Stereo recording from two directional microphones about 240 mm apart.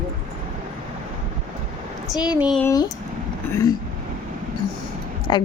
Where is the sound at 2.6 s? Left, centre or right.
Centre.